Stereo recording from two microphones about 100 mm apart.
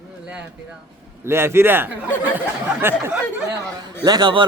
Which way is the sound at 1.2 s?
25° right (ahead or behind).